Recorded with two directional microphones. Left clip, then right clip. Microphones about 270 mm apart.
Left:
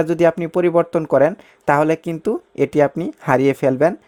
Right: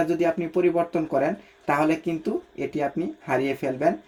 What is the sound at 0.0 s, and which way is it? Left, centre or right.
Speech, left.